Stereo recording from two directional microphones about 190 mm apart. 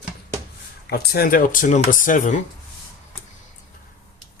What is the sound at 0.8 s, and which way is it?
Speech, 55° left (ahead or behind).